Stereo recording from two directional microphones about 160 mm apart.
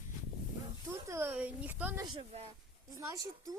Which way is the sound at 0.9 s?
15° right (ahead or behind).